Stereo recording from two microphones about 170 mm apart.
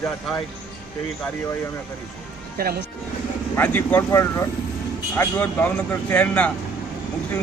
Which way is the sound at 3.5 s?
10° left (ahead or behind).